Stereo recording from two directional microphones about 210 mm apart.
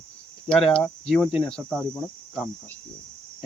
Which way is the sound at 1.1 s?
25° left (ahead or behind).